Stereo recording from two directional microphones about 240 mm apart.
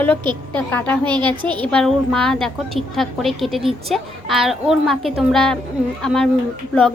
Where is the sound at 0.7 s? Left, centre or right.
Centre.